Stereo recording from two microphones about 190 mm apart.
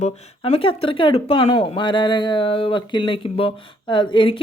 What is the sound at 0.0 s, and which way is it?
Speech, 30° left (ahead or behind).